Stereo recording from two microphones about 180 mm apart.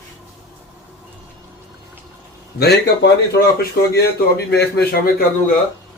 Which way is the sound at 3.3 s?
60° left (ahead or behind).